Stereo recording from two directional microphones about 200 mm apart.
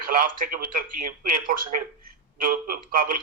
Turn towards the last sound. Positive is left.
turn(degrees=-45)  # may be behind; listen again after turning